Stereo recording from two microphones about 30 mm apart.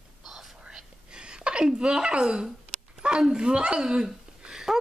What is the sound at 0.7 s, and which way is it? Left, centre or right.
Whispering, right.